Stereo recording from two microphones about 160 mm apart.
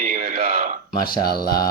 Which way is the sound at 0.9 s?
70° left (ahead or behind).